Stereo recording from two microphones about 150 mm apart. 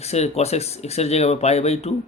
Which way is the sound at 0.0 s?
45° left (ahead or behind).